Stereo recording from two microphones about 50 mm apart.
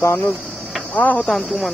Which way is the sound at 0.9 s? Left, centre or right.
Left.